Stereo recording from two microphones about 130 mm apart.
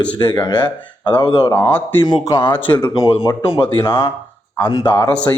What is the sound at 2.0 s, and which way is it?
Speech, 35° left (ahead or behind).